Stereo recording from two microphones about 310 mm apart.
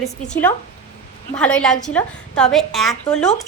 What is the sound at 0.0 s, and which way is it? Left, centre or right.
A woman's voice, centre.